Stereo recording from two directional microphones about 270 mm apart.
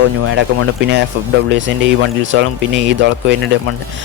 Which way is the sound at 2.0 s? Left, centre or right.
Right.